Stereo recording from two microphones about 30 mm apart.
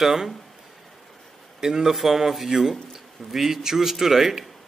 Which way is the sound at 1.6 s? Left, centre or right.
Centre.